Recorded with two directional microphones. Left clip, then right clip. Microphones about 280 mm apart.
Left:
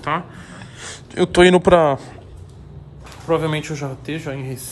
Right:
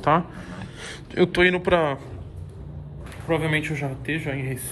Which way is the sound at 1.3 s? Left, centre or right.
Centre.